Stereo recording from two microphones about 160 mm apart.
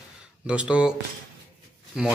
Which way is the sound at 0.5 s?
5° right (ahead or behind).